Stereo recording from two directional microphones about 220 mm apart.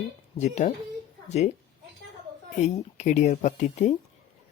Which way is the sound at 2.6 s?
30° left (ahead or behind).